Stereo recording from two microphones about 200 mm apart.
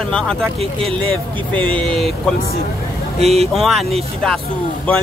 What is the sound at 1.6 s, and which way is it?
Speech, 5° left (ahead or behind).